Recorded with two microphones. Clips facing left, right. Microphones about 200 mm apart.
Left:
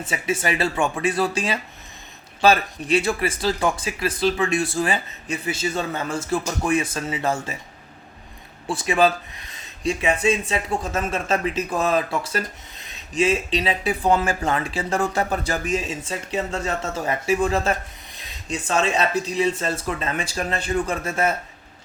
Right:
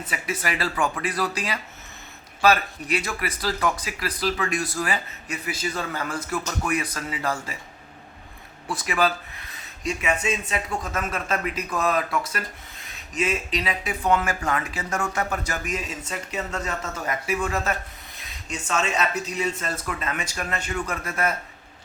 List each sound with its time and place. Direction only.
0.1 s speech: 25° left (ahead or behind)
8.6 s speech: 30° left (ahead or behind)